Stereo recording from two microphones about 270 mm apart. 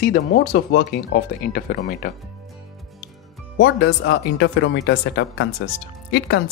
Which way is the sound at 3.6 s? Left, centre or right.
Left.